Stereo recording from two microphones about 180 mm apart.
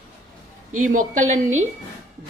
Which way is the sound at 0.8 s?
45° right (ahead or behind).